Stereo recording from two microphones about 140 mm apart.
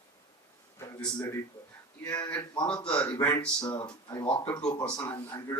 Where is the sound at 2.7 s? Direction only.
10° left (ahead or behind).